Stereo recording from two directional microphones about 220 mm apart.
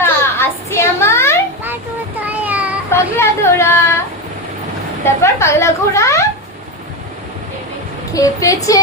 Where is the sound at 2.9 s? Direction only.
10° left (ahead or behind).